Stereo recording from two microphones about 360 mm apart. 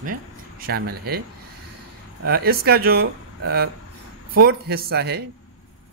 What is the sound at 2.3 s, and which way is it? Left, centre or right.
Speech, right.